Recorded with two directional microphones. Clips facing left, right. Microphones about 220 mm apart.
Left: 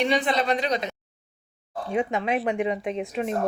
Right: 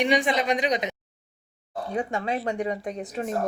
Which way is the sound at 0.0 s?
15° right (ahead or behind).